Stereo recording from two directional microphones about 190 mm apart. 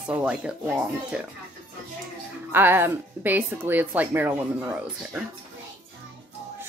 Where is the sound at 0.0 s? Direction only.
5° right (ahead or behind).